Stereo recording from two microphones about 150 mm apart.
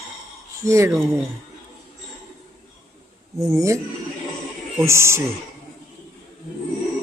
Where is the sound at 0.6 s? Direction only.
20° right (ahead or behind).